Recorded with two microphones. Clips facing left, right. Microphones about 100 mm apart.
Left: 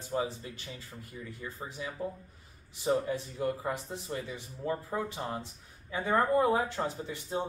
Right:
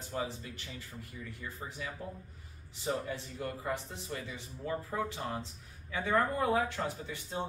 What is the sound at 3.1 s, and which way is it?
Speech, 20° left (ahead or behind).